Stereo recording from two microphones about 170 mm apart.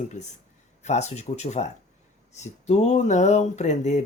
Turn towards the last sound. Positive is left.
turn(degrees=45)  # may be behind; listen again after turning